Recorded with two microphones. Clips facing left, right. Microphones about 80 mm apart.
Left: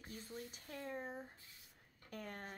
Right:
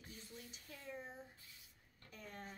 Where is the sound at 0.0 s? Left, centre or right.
Left.